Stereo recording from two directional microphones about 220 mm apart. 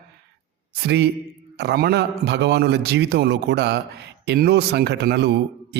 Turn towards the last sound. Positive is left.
turn(degrees=-50)  # may be behind; listen again after turning